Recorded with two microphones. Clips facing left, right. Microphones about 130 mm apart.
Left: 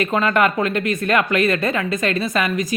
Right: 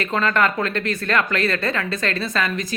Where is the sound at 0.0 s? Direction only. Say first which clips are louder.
Left 3 dB; 15° left (ahead or behind).